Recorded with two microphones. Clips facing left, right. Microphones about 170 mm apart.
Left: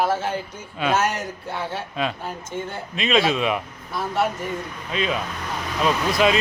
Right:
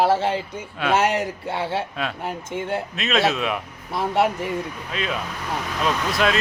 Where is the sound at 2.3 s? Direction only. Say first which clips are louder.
Right 3 dB; 75° right (ahead or behind).